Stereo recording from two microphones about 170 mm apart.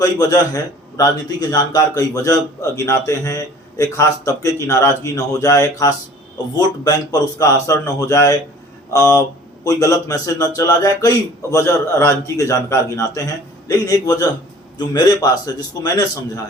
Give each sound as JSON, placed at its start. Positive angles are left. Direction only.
{"t": 0.0, "sound": "a man's voice", "side_deg": 20}